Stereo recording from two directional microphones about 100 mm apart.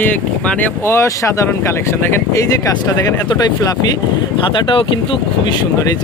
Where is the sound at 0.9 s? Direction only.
30° left (ahead or behind).